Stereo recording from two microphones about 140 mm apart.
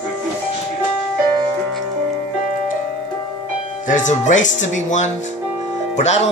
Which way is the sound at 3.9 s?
60° left (ahead or behind).